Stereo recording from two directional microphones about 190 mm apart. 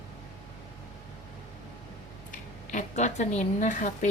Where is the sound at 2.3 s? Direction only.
40° left (ahead or behind).